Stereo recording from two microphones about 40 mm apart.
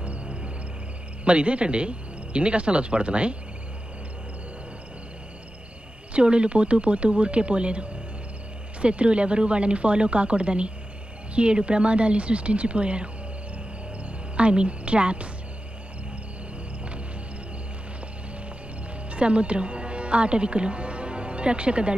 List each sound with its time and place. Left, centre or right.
0.0 s music: right
1.2 s speech: right
6.1 s speech: right
14.3 s a woman's voice: right
19.0 s speech: right